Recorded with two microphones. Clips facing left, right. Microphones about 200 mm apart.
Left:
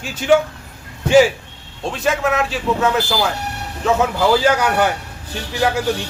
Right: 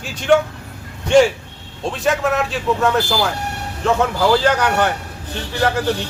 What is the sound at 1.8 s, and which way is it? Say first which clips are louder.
A man's voice: even; centre (ahead or behind).